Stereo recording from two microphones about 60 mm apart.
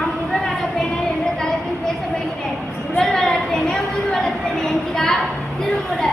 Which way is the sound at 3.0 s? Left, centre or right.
Centre.